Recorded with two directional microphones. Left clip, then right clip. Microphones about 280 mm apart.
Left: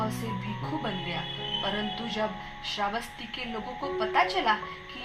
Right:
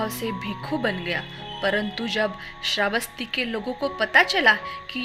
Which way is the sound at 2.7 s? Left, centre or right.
Right.